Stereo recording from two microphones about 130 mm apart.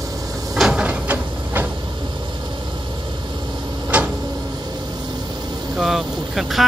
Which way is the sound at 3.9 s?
10° right (ahead or behind).